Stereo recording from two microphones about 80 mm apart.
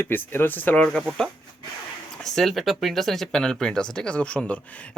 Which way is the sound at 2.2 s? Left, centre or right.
Centre.